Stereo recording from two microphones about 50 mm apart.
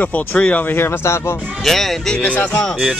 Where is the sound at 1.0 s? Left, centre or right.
Left.